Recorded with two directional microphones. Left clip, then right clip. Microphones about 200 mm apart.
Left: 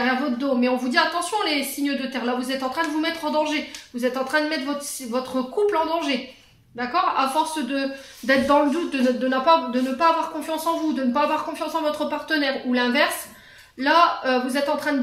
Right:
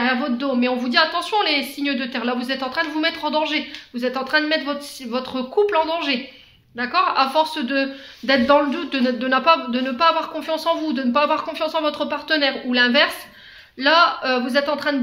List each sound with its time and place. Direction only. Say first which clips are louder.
0.4 s a woman's voice: right 1 dB; 35° right (ahead or behind)